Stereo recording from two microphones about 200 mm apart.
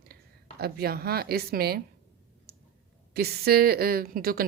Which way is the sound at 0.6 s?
50° right (ahead or behind).